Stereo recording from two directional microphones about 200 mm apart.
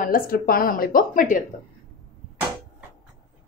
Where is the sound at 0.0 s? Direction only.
45° left (ahead or behind).